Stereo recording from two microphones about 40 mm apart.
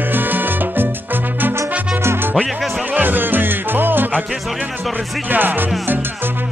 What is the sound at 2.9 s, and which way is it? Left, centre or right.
Music, right.